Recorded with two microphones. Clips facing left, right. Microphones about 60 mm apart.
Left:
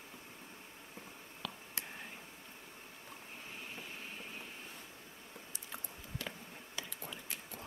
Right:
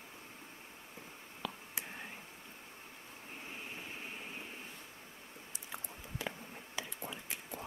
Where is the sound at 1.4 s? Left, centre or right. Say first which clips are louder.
Right 3 dB; centre.